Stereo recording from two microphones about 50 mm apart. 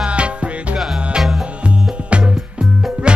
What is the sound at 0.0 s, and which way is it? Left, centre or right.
Music, right.